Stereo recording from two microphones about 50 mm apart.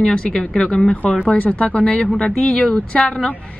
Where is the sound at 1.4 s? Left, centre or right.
Left.